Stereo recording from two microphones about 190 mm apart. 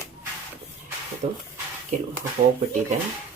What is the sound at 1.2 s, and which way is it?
Speech, 35° right (ahead or behind).